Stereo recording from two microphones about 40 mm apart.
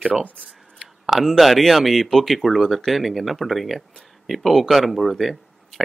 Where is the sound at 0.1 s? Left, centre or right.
Centre.